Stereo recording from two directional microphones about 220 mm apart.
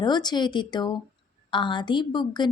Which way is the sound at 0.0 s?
20° left (ahead or behind).